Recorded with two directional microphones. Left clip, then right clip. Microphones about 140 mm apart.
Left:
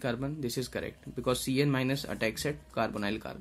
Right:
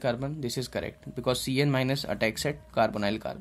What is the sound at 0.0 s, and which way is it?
Speech, 15° right (ahead or behind).